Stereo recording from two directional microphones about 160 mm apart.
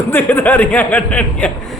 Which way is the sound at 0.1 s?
10° left (ahead or behind).